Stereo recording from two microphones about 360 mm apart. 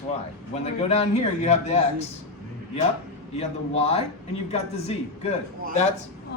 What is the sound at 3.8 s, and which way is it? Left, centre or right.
Speech, centre.